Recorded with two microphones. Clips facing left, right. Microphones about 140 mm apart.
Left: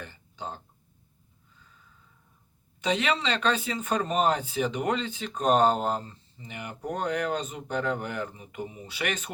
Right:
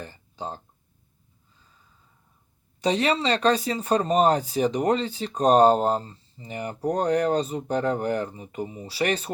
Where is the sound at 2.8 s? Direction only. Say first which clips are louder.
Right 4 dB; 35° right (ahead or behind).